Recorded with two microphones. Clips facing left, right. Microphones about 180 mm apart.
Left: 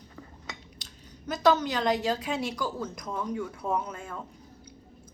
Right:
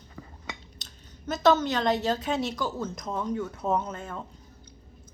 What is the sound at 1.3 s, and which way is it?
A woman's voice, 10° left (ahead or behind).